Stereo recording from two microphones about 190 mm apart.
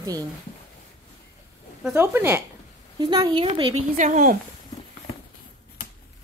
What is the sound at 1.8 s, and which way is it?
Speech, 10° right (ahead or behind).